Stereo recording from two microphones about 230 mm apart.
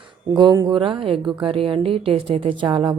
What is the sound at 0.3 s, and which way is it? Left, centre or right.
Speech, centre.